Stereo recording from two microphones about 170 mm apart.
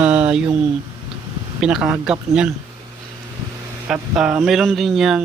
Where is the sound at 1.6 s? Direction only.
5° right (ahead or behind).